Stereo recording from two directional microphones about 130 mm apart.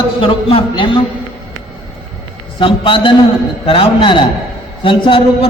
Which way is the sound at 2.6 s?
40° left (ahead or behind).